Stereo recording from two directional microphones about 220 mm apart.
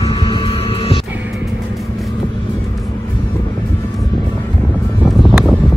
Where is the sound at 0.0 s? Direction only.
15° left (ahead or behind).